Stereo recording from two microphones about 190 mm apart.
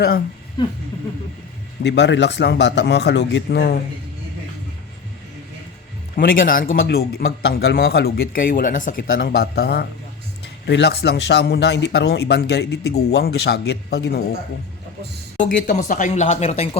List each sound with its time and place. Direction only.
0.6 s speech: 25° left (ahead or behind)
1.8 s speech: 65° left (ahead or behind)
6.1 s speech: 45° left (ahead or behind)
6.7 s speech: 60° left (ahead or behind)
15.4 s speech: 45° left (ahead or behind)